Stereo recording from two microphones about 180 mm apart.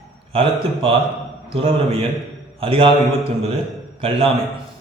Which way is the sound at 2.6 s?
30° right (ahead or behind).